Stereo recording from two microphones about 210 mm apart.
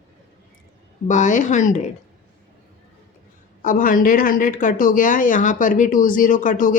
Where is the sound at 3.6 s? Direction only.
40° left (ahead or behind).